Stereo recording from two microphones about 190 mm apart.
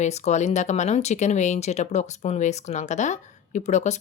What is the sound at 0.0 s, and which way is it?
Speech, 35° left (ahead or behind).